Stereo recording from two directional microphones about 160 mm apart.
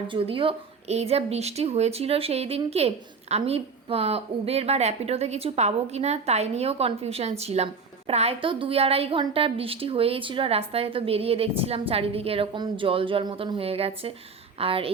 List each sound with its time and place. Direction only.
0.1 s a woman's voice: 35° right (ahead or behind)